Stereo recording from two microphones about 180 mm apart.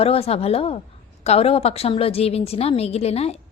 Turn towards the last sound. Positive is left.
turn(degrees=35)  # may be behind; listen again after turning